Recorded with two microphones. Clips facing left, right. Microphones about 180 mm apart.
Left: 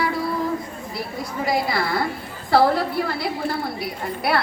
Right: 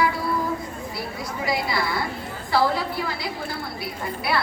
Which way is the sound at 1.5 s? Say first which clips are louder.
Left 3 dB; 55° left (ahead or behind).